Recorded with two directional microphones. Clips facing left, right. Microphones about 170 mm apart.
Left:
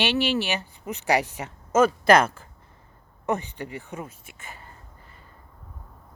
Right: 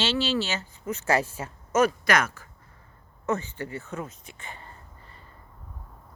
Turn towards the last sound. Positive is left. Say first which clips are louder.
# right 1 dB
turn(degrees=10)  # may be behind; listen again after turning